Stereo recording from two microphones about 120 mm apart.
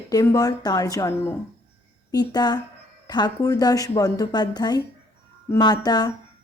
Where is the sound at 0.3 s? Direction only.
30° left (ahead or behind).